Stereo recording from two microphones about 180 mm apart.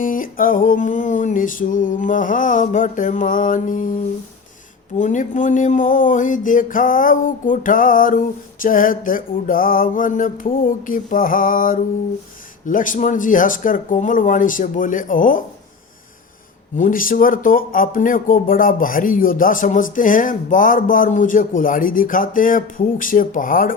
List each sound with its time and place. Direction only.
0.0 s speech: 50° left (ahead or behind)
4.9 s speech: 45° left (ahead or behind)
16.7 s speech: 50° left (ahead or behind)